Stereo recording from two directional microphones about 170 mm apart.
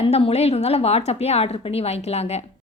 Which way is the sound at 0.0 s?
35° left (ahead or behind).